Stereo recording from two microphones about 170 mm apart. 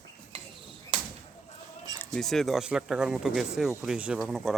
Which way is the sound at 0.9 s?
35° right (ahead or behind).